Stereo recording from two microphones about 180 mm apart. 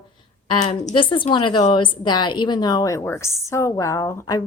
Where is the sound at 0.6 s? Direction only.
40° left (ahead or behind).